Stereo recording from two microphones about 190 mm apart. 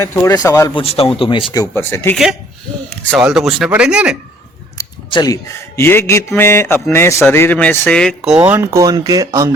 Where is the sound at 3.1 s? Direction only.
5° right (ahead or behind).